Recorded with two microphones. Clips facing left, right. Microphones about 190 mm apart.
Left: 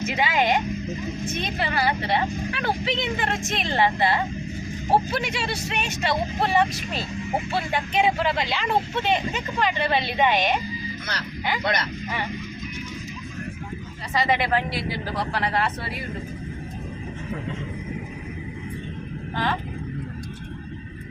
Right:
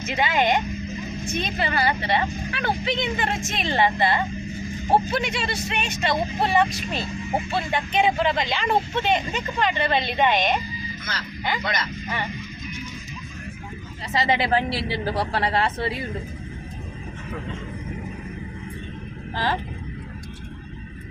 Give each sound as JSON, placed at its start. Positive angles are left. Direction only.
{"t": 0.0, "sound": "speech", "side_deg": 10}
{"t": 11.6, "sound": "speech", "side_deg": 55}
{"t": 14.1, "sound": "speech", "side_deg": -25}